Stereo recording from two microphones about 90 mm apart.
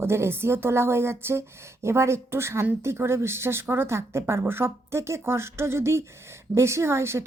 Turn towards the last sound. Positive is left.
turn(degrees=-30)  # may be behind; listen again after turning